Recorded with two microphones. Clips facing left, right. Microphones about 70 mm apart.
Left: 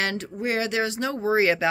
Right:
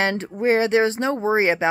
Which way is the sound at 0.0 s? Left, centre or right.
Right.